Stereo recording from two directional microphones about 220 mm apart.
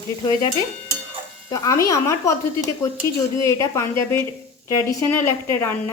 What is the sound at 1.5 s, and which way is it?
Speech, 15° left (ahead or behind).